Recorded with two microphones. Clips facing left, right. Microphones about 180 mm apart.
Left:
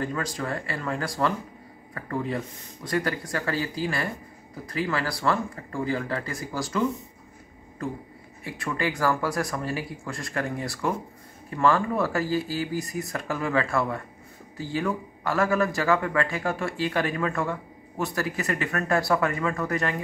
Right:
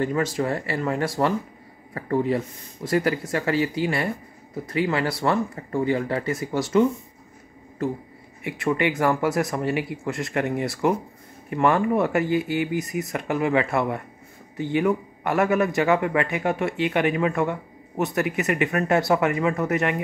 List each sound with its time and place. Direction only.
0.0 s speech: 25° right (ahead or behind)
8.6 s speech: 20° right (ahead or behind)